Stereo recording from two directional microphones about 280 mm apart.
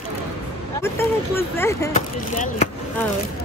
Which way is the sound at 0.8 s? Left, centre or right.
Centre.